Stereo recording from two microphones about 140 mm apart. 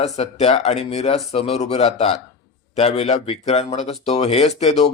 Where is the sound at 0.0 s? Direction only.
50° left (ahead or behind).